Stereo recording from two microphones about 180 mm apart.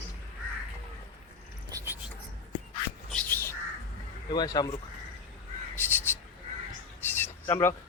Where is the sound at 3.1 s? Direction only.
10° left (ahead or behind).